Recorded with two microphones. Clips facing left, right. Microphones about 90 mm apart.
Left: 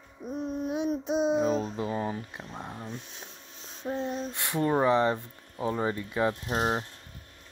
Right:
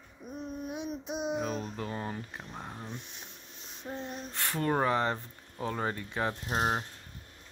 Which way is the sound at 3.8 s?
90° left.